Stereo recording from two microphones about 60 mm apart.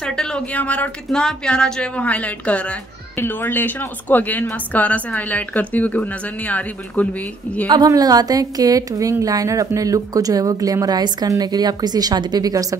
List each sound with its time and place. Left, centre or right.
0.0 s speech: centre
0.5 s a woman's voice: left
1.1 s a woman's voice: centre
3.2 s a woman's voice: left
7.8 s a woman's voice: right